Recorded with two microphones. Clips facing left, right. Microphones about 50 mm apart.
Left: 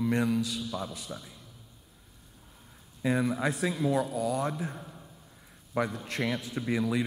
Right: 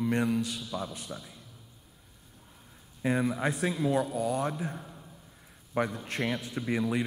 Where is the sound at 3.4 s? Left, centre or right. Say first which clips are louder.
Even; right.